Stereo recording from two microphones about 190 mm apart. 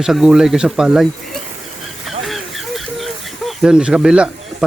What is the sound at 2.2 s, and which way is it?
Snake, centre (ahead or behind).